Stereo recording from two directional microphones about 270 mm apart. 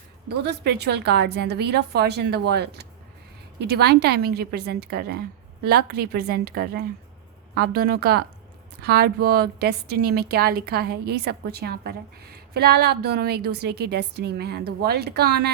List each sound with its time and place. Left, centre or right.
0.4 s a woman's voice: right